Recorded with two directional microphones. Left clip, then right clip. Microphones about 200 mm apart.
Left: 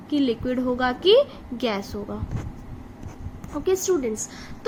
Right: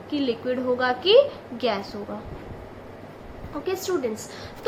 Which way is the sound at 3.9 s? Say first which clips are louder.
Left 2 dB; 40° left (ahead or behind).